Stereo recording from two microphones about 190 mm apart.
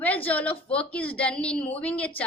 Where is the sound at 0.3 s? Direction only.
10° left (ahead or behind).